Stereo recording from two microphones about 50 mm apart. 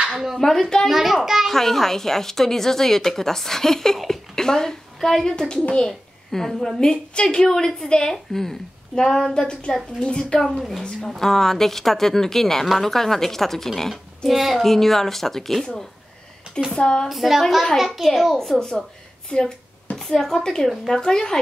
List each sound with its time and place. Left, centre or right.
0.0 s a woman's voice: centre
0.4 s a woman's voice: centre
0.8 s a child's voice: centre
1.5 s a woman's voice: centre
10.4 s a child's voice: centre
16.7 s a woman's voice: centre
17.1 s a child's voice: centre
19.3 s a child's voice: left
20.0 s a woman's voice: centre